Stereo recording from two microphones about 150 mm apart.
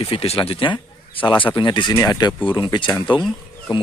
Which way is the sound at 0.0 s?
40° left (ahead or behind).